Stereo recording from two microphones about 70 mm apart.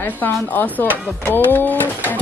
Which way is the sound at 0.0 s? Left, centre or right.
Left.